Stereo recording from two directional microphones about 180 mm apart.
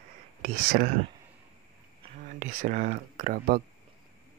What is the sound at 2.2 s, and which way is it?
Speech, 45° right (ahead or behind).